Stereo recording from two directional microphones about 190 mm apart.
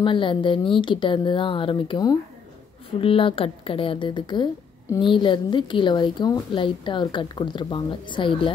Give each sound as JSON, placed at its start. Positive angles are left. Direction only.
{"t": 0.0, "sound": "a woman's voice", "side_deg": 25}